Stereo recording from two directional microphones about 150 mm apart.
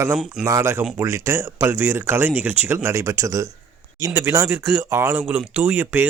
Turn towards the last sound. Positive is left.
turn(degrees=-15)  # may be behind; listen again after turning